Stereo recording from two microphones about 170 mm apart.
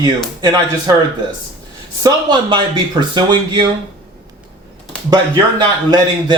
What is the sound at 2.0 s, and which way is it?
Speech, 25° right (ahead or behind).